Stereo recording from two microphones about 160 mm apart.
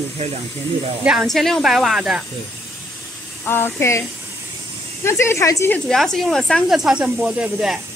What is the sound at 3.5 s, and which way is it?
Speech, 15° left (ahead or behind).